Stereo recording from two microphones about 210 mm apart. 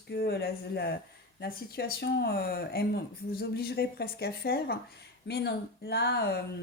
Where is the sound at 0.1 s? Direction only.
50° left (ahead or behind).